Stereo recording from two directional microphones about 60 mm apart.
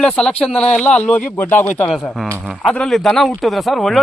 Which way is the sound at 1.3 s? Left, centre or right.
Left.